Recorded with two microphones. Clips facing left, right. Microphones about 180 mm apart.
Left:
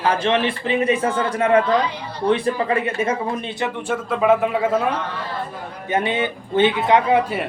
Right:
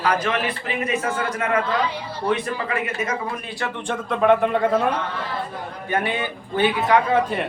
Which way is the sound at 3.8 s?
5° left (ahead or behind).